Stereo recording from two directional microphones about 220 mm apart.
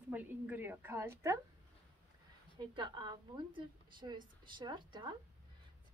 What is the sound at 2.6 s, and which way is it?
A woman's voice, 20° right (ahead or behind).